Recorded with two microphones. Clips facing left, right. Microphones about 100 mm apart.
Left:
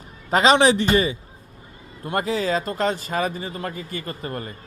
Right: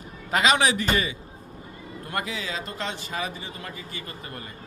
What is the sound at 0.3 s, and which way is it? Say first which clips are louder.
Speech: left 6 dB; 35° left (ahead or behind).